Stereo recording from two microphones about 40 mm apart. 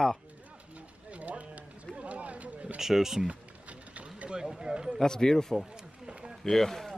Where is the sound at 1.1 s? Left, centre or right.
Right.